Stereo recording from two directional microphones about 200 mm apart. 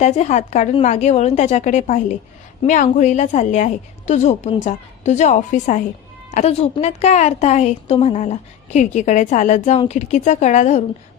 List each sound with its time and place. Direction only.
0.0 s a woman's voice: 35° left (ahead or behind)